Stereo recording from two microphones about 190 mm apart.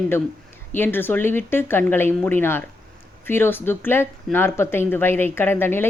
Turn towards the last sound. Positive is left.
turn(degrees=10)  # may be behind; listen again after turning